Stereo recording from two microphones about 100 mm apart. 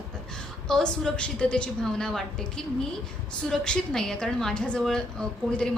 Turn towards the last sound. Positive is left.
turn(degrees=5)  # may be behind; listen again after turning